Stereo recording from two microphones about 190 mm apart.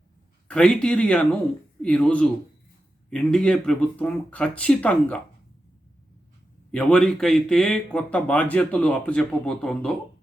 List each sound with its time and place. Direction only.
0.4 s speech: 5° left (ahead or behind)
6.7 s speech: 5° left (ahead or behind)